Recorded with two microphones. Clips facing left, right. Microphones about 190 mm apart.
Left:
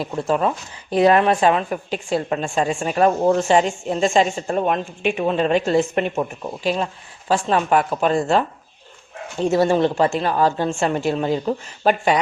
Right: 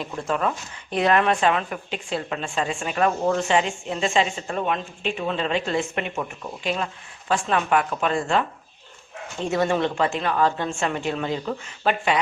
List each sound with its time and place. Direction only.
0.0 s speech: 30° left (ahead or behind)